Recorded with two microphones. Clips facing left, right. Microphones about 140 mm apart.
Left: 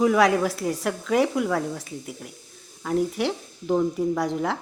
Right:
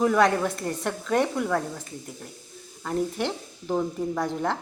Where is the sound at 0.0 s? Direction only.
5° left (ahead or behind).